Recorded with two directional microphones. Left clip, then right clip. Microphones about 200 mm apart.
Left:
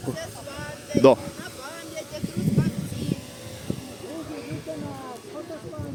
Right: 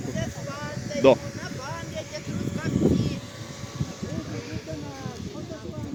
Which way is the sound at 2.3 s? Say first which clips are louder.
Left 1 dB; 55° left (ahead or behind).